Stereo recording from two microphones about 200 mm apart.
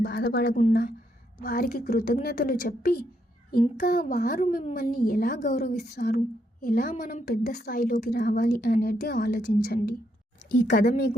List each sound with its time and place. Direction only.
0.0 s a woman's voice: 50° left (ahead or behind)
10.8 s a woman's voice: 45° left (ahead or behind)